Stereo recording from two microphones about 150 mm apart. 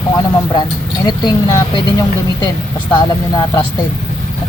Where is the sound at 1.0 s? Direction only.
25° left (ahead or behind).